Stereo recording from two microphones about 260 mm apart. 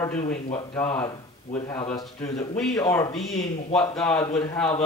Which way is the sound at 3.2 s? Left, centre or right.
Left.